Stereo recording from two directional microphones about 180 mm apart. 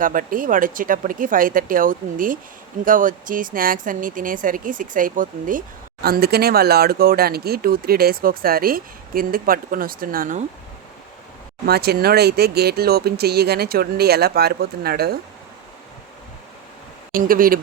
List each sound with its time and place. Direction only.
0.0 s speech: 50° right (ahead or behind)
11.6 s speech: 65° right (ahead or behind)
17.2 s speech: 50° right (ahead or behind)